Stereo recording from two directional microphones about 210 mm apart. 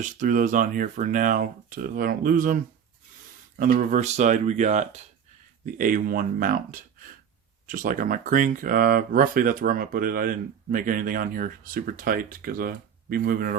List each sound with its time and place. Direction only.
0.0 s speech: 40° right (ahead or behind)
3.6 s speech: 40° right (ahead or behind)